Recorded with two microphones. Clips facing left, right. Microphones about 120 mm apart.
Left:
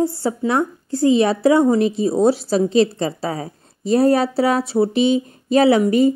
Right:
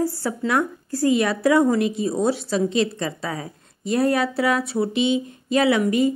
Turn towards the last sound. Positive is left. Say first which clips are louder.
# left 5 dB
turn(degrees=35)  # may be behind; listen again after turning